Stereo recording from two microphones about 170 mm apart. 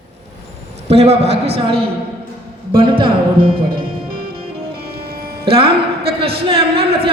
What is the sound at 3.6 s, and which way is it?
Music, 60° right (ahead or behind).